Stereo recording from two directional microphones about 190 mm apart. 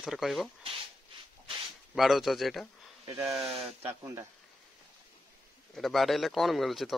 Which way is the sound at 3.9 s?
15° right (ahead or behind).